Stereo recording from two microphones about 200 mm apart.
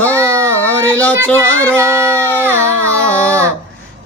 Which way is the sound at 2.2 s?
10° left (ahead or behind).